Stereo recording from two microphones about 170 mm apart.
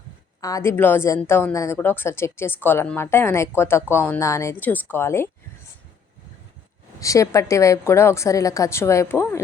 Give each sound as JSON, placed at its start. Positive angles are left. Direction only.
{"t": 0.4, "sound": "a woman's voice", "side_deg": 20}
{"t": 7.0, "sound": "a woman's voice", "side_deg": 20}